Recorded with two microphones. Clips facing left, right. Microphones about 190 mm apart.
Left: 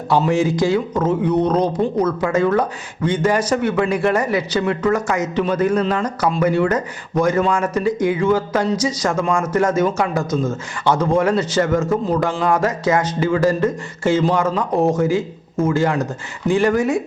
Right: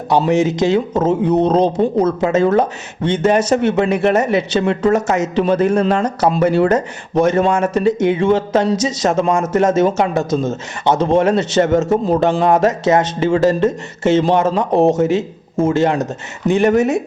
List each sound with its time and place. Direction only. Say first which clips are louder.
0.3 s a man's voice: right 3 dB; 20° right (ahead or behind)